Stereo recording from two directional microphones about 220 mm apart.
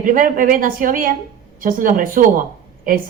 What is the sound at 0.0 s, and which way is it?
Speech, 40° right (ahead or behind).